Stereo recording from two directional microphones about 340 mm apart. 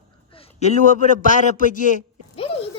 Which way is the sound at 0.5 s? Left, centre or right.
Centre.